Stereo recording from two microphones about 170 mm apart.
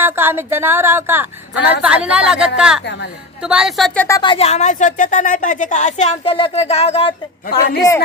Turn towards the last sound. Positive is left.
turn(degrees=60)  # may be behind; listen again after turning